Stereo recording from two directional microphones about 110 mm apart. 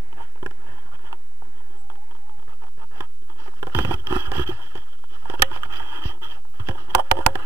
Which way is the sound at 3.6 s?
25° right (ahead or behind).